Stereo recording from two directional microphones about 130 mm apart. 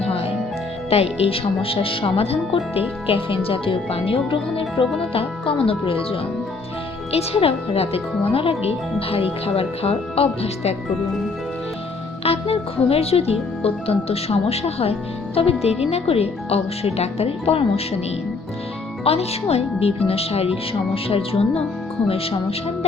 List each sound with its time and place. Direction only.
0.0 s music: 45° left (ahead or behind)
0.9 s speech: 50° left (ahead or behind)
12.2 s speech: 50° left (ahead or behind)
19.0 s speech: 50° left (ahead or behind)